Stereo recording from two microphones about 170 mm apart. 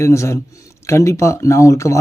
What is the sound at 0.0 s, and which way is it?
Speech, 15° left (ahead or behind).